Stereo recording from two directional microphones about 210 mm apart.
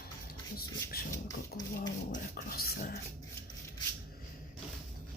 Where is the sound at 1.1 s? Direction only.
15° left (ahead or behind).